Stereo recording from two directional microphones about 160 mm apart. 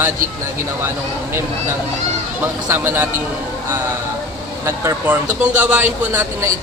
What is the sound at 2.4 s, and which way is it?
Speech, 15° right (ahead or behind).